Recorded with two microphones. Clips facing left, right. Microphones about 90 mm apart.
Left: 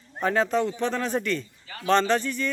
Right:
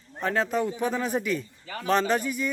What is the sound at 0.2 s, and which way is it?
A man's voice, centre (ahead or behind).